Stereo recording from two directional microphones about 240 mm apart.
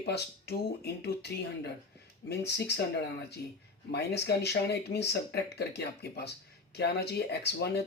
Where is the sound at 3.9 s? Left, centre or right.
Left.